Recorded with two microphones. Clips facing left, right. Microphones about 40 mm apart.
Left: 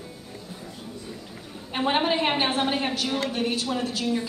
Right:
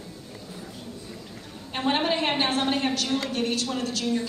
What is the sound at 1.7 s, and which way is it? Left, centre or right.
A woman's voice, centre.